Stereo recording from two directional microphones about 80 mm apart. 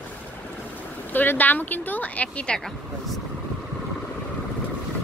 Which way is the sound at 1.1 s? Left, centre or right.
Left.